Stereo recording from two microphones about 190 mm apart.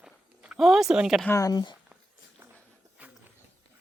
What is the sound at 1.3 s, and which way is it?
Speech, 20° left (ahead or behind).